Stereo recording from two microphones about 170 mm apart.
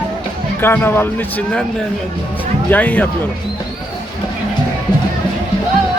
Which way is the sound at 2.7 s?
10° left (ahead or behind).